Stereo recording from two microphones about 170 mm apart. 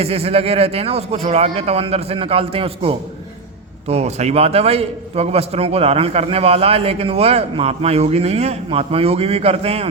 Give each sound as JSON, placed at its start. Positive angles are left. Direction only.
{"t": 0.0, "sound": "a man's voice", "side_deg": -35}